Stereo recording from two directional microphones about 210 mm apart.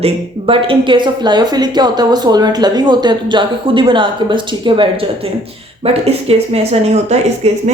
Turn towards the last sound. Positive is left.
turn(degrees=-30)  # may be behind; listen again after turning